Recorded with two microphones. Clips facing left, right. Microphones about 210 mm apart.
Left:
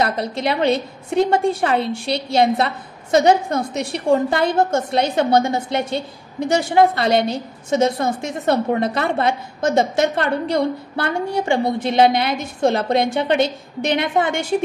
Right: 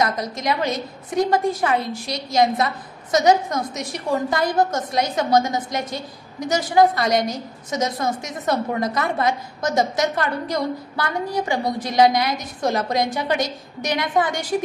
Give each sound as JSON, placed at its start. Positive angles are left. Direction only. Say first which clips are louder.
{"t": 0.0, "sound": "a woman's voice", "louder": "left 2 dB", "side_deg": 30}